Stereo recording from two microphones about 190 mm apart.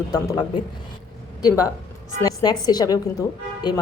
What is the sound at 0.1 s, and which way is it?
A woman's voice, 20° left (ahead or behind).